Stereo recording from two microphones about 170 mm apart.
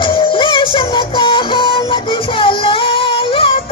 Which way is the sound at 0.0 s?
30° left (ahead or behind).